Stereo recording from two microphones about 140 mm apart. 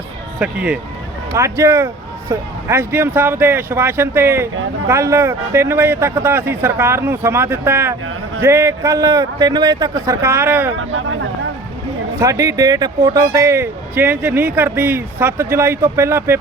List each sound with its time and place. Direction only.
0.3 s speech: 10° right (ahead or behind)
1.4 s a man's voice: 20° right (ahead or behind)
12.2 s speech: 25° right (ahead or behind)